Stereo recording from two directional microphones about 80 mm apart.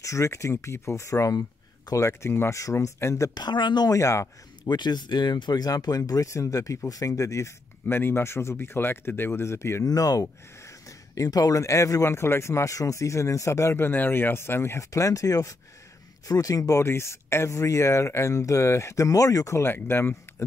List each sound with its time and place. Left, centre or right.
0.0 s speech: left
3.3 s speech: left
3.9 s speech: left
4.6 s speech: left
7.8 s speech: left
9.8 s speech: left
14.9 s speech: left
16.8 s speech: left